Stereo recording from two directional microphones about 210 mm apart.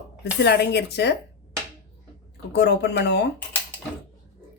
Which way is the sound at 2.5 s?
50° left (ahead or behind).